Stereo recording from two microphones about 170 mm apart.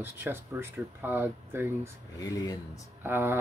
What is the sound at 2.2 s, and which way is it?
Speech, 20° left (ahead or behind).